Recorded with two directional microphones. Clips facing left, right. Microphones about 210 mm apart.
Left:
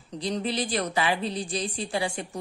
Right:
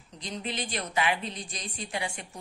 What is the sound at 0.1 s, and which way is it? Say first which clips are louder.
A woman's voice: left 7 dB; 35° left (ahead or behind).